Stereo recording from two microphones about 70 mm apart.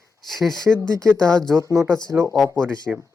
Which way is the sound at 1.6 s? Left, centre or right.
Right.